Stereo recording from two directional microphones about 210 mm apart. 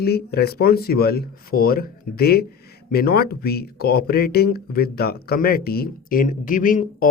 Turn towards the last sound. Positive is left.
turn(degrees=40)  # may be behind; listen again after turning